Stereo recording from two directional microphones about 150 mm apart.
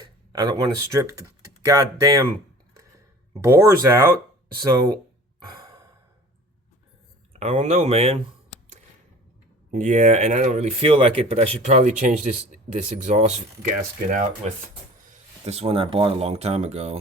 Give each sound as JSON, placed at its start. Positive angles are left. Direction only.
{"t": 0.3, "sound": "speech", "side_deg": -25}
{"t": 3.4, "sound": "speech", "side_deg": -20}
{"t": 5.5, "sound": "sigh", "side_deg": -25}
{"t": 7.3, "sound": "speech", "side_deg": -45}
{"t": 9.7, "sound": "speech", "side_deg": -55}
{"t": 15.4, "sound": "speech", "side_deg": -45}